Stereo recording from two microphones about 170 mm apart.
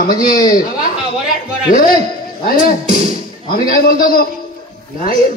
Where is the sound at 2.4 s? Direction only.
60° left (ahead or behind).